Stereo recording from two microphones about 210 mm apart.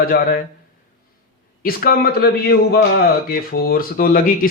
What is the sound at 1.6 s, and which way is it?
A man's voice, 45° left (ahead or behind).